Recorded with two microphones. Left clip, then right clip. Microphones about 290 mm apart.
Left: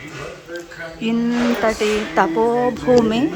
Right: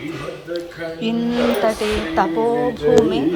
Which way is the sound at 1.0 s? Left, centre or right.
Centre.